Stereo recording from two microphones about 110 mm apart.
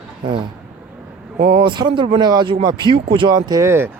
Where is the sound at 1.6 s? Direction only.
45° right (ahead or behind).